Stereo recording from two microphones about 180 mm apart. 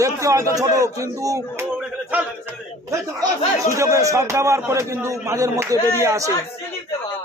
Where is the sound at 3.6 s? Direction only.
15° right (ahead or behind).